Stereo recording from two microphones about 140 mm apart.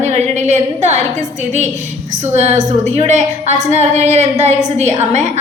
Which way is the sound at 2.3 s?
55° right (ahead or behind).